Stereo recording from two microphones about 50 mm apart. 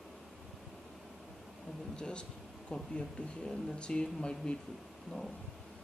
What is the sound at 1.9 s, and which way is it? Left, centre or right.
Speech, centre.